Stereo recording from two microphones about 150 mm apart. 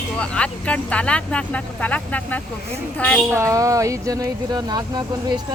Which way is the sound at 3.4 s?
20° right (ahead or behind).